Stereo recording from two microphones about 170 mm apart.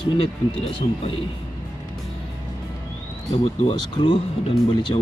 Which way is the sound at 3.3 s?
35° left (ahead or behind).